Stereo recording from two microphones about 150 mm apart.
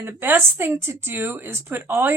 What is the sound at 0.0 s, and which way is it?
Speech, 15° right (ahead or behind).